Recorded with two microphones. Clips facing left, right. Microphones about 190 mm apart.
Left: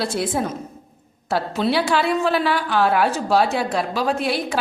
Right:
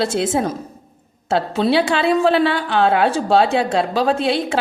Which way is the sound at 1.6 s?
30° right (ahead or behind).